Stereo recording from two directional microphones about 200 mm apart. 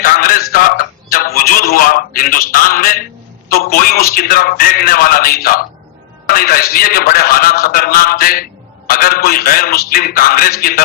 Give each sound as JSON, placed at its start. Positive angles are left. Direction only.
{"t": 0.0, "sound": "a man's voice", "side_deg": 45}